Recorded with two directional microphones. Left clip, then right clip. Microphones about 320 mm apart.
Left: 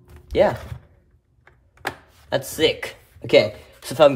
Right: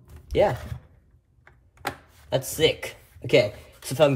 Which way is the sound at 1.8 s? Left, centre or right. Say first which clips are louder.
Left 3 dB; centre.